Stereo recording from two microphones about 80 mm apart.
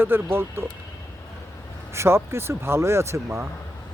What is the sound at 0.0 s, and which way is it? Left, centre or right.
Speech, right.